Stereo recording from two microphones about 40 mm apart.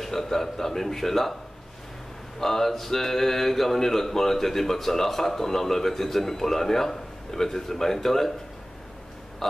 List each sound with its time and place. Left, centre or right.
0.0 s speech: centre
2.4 s speech: centre
9.4 s speech: centre